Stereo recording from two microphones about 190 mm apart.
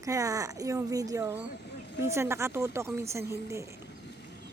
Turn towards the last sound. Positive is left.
turn(degrees=-15)  # may be behind; listen again after turning